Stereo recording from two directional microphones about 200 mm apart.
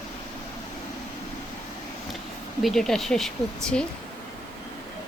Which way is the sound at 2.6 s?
Centre (ahead or behind).